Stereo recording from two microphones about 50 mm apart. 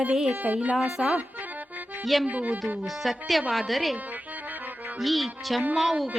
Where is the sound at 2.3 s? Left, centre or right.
Right.